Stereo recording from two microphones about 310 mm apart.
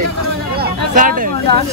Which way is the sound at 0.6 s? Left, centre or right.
Right.